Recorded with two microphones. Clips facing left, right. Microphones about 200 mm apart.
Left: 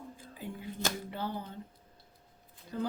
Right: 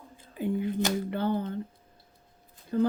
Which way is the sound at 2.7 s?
50° right (ahead or behind).